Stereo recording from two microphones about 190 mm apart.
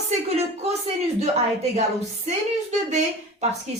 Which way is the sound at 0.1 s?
35° right (ahead or behind).